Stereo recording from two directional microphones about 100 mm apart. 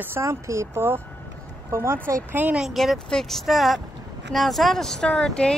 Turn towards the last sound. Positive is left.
turn(degrees=5)  # may be behind; listen again after turning